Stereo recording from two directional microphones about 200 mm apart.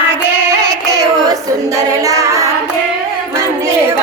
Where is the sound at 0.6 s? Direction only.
15° right (ahead or behind).